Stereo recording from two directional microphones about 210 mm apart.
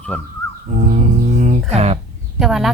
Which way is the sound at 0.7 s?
35° right (ahead or behind).